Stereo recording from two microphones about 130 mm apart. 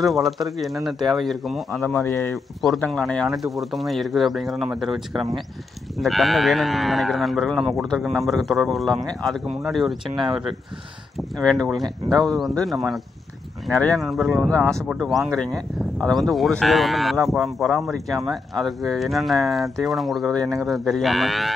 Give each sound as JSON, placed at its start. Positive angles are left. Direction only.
{"t": 0.0, "sound": "speech", "side_deg": 0}
{"t": 1.9, "sound": "speech", "side_deg": 20}
{"t": 2.3, "sound": "speech", "side_deg": 0}
{"t": 14.6, "sound": "speech", "side_deg": -25}
{"t": 14.9, "sound": "speech", "side_deg": 0}